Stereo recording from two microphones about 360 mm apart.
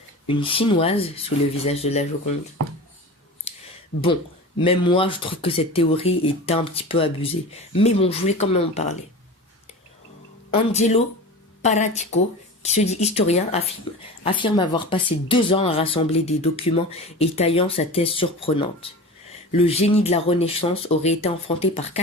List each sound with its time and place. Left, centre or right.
0.3 s speech: centre
3.5 s clicking: centre
4.5 s speech: centre
10.5 s speech: centre